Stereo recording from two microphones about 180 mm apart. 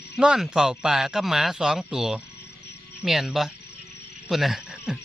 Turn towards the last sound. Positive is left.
turn(degrees=0)  # may be behind; listen again after turning